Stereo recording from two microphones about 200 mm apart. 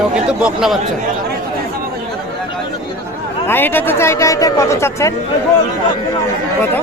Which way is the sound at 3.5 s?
10° left (ahead or behind).